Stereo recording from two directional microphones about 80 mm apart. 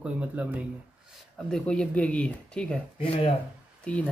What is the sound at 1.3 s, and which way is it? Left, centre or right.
Speech, centre.